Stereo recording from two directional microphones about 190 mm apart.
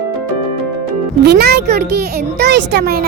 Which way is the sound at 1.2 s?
55° right (ahead or behind).